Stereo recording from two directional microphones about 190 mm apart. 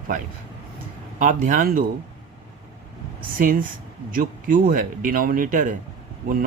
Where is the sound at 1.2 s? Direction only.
45° right (ahead or behind).